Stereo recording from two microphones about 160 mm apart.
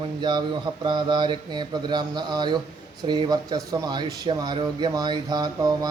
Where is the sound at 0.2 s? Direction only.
30° right (ahead or behind).